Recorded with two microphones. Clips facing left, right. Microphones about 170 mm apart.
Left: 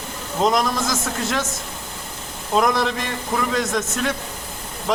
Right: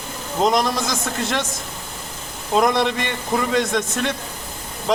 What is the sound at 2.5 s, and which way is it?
A man's voice, centre (ahead or behind).